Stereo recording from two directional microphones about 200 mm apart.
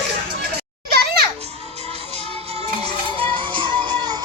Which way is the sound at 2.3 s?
30° right (ahead or behind).